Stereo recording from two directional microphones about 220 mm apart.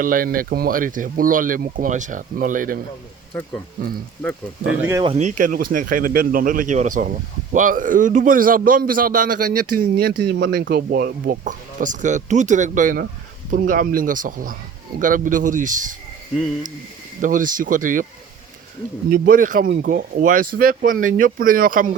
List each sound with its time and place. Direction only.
0.0 s speech: 40° right (ahead or behind)
3.3 s speech: 10° left (ahead or behind)
4.6 s speech: 60° right (ahead or behind)
4.9 s speech: 15° right (ahead or behind)
5.1 s speech: 35° right (ahead or behind)
17.2 s speech: 35° right (ahead or behind)
19.1 s speech: 40° right (ahead or behind)